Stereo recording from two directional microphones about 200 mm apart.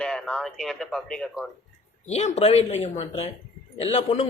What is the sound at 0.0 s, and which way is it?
Speech, 5° left (ahead or behind).